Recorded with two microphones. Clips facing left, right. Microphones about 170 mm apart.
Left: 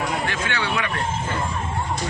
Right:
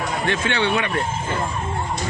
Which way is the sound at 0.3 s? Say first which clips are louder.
Right 5 dB; 25° right (ahead or behind).